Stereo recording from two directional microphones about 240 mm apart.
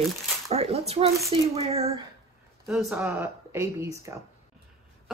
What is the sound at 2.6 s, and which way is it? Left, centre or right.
Speech, centre.